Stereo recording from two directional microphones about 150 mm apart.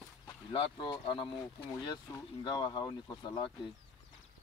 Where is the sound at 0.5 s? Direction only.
30° left (ahead or behind).